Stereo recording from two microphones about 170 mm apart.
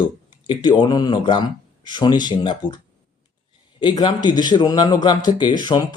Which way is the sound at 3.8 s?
25° left (ahead or behind).